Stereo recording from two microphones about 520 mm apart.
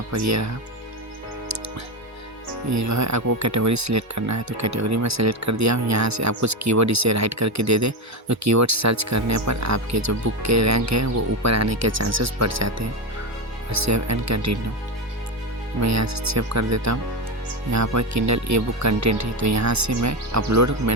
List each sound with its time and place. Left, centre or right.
0.1 s speech: right
2.6 s speech: right
15.8 s speech: right